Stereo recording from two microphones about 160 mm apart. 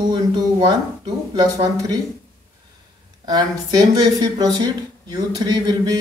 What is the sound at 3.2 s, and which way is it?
Speech, 25° right (ahead or behind).